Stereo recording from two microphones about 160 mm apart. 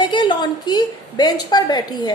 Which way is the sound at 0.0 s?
30° left (ahead or behind).